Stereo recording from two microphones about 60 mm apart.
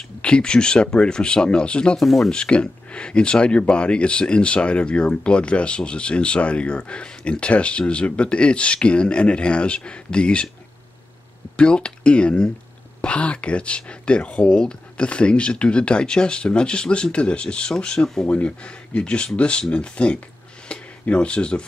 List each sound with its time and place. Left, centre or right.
0.2 s speech: centre
2.0 s speech: centre
2.3 s speech: centre
11.5 s speech: centre
18.2 s speech: left
20.6 s a sound: centre